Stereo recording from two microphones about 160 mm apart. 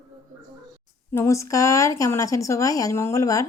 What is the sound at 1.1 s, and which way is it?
A woman's voice, 20° left (ahead or behind).